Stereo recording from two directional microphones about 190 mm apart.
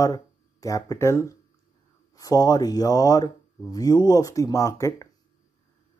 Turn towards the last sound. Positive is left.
turn(degrees=15)  # may be behind; listen again after turning